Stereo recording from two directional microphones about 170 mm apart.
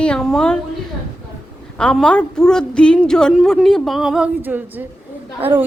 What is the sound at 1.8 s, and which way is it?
A woman's voice, 5° left (ahead or behind).